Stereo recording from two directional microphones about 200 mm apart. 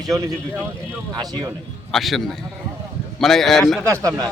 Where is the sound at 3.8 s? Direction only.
15° right (ahead or behind).